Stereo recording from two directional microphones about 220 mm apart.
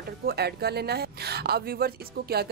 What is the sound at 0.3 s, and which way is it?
Speech, 45° right (ahead or behind).